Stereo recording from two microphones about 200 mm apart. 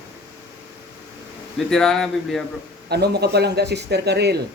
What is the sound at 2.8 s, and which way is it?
Speech, 55° right (ahead or behind).